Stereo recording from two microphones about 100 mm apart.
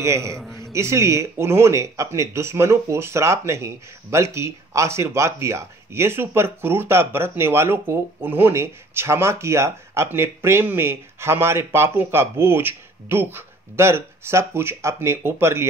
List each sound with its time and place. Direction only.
0.0 s speech: 30° right (ahead or behind)